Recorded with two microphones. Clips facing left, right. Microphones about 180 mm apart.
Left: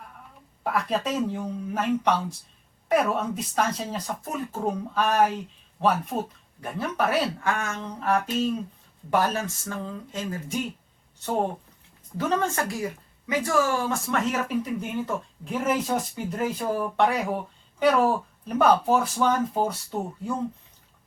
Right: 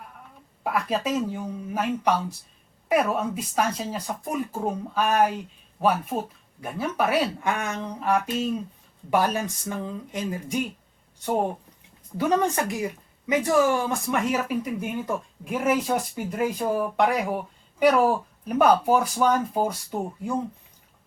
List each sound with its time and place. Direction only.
0.6 s speech: 5° right (ahead or behind)
12.1 s speech: 15° right (ahead or behind)